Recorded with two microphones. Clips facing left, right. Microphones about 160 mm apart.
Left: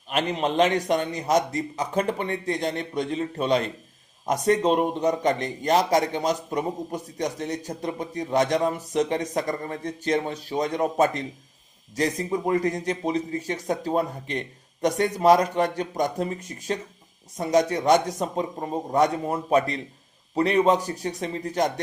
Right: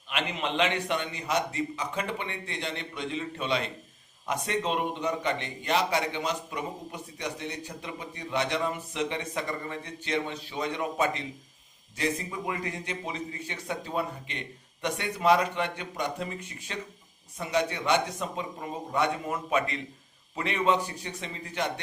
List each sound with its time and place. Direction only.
0.1 s a man's voice: 40° left (ahead or behind)